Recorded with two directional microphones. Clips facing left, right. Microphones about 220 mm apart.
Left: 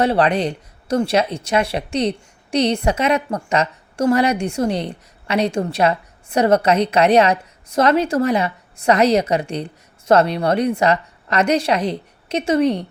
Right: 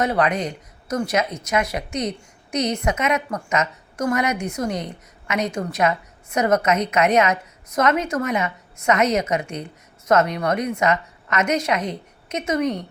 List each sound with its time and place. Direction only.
0.0 s speech: 30° left (ahead or behind)